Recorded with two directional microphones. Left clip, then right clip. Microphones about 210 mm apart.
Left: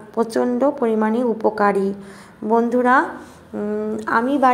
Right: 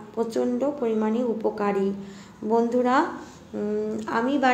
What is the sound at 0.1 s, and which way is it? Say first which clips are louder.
A woman's voice: left 6 dB; 30° left (ahead or behind).